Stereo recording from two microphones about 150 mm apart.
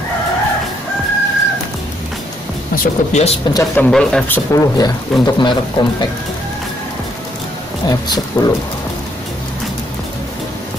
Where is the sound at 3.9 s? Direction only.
5° left (ahead or behind).